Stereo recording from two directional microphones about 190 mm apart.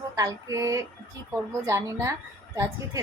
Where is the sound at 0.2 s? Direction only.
15° right (ahead or behind).